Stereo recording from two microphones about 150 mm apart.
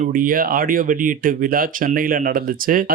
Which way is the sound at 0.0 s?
65° right (ahead or behind).